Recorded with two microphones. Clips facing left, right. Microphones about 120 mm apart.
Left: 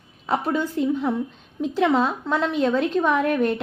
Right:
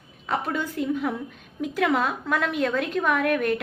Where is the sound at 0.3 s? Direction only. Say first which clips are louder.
Left 4 dB; 30° left (ahead or behind).